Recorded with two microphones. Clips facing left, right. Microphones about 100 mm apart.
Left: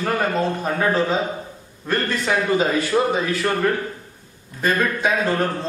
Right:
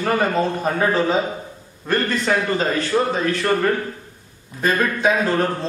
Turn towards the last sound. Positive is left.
turn(degrees=0)  # may be behind; listen again after turning